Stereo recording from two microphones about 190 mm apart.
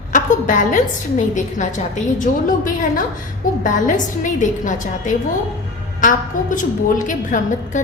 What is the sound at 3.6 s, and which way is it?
A woman's voice, 45° left (ahead or behind).